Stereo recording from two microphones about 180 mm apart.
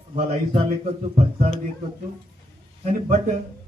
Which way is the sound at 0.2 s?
35° right (ahead or behind).